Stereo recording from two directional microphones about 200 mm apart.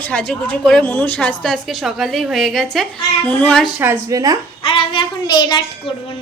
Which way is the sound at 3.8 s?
15° right (ahead or behind).